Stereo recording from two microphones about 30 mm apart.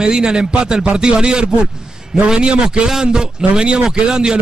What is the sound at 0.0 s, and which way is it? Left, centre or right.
A man's voice, right.